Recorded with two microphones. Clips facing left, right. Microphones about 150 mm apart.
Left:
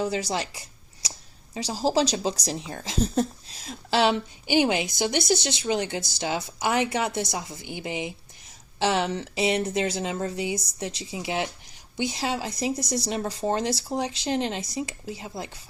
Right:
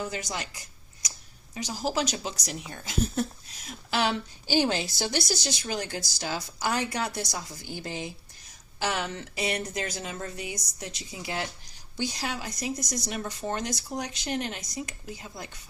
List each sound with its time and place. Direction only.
0.0 s a woman's voice: 30° left (ahead or behind)